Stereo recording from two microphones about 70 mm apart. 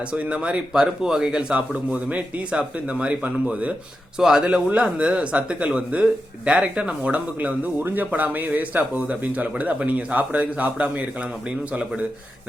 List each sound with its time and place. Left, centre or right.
0.1 s speech: centre